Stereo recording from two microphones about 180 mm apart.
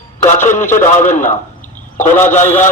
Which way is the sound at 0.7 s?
45° left (ahead or behind).